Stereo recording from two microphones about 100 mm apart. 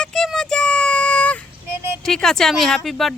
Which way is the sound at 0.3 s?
5° left (ahead or behind).